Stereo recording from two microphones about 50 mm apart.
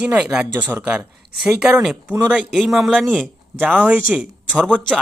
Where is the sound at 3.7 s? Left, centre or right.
Right.